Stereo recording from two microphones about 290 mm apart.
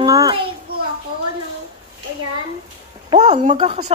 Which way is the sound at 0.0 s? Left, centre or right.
Centre.